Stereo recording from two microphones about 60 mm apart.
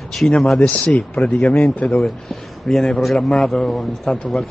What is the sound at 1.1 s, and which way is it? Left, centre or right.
Speech, centre.